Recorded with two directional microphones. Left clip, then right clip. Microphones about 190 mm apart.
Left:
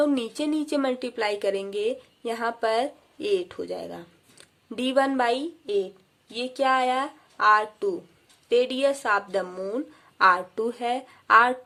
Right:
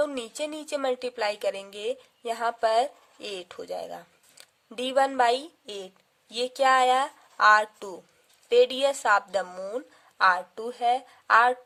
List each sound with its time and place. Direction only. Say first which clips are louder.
0.0 s speech: left 4 dB; 30° right (ahead or behind)